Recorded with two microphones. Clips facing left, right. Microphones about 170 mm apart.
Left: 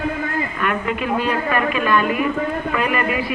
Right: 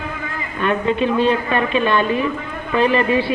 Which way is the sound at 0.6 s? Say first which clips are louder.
Right 7 dB; 25° right (ahead or behind).